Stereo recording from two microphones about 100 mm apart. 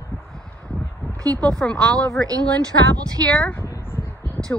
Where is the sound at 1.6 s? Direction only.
10° left (ahead or behind).